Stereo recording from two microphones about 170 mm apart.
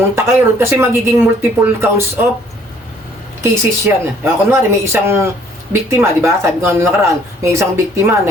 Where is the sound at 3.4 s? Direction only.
15° right (ahead or behind).